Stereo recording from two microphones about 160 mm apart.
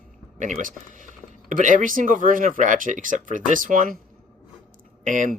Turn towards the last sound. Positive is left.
turn(degrees=-55)  # may be behind; listen again after turning